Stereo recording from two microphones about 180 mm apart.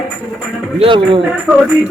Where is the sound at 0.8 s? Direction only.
25° right (ahead or behind).